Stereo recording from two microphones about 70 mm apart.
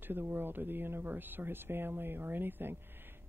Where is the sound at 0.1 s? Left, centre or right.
Right.